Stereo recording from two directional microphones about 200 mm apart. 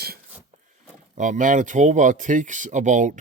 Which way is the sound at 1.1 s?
40° right (ahead or behind).